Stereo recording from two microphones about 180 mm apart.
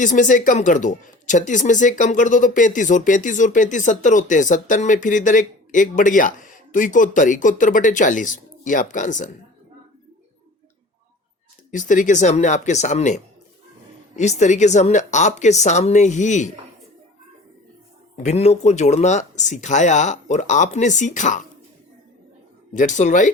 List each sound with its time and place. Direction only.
0.0 s speech: 45° left (ahead or behind)
11.7 s speech: 45° left (ahead or behind)
18.2 s speech: 40° left (ahead or behind)
22.7 s speech: 45° left (ahead or behind)